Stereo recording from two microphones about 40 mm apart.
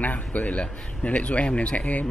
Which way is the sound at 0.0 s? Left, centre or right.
Left.